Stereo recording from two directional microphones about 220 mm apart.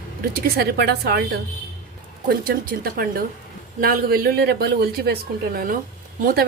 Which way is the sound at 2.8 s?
40° right (ahead or behind).